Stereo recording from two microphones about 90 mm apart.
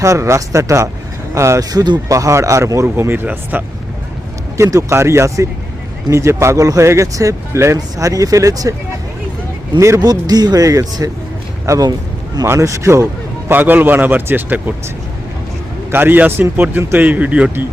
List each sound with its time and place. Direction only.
0.0 s speech: 35° right (ahead or behind)
1.7 s speech: 45° right (ahead or behind)
2.8 s speech: 25° right (ahead or behind)
4.5 s speech: 35° right (ahead or behind)
9.8 s speech: 30° right (ahead or behind)
10.1 s a man's voice: 45° right (ahead or behind)
13.5 s speech: 20° right (ahead or behind)
15.9 s speech: 25° right (ahead or behind)